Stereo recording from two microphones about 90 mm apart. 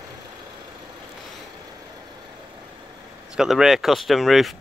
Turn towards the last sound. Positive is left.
turn(degrees=0)  # may be behind; listen again after turning